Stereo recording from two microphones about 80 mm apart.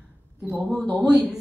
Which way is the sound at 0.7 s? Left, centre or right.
Centre.